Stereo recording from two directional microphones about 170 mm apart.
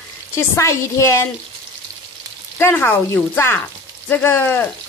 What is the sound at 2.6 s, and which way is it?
Speech, 10° left (ahead or behind).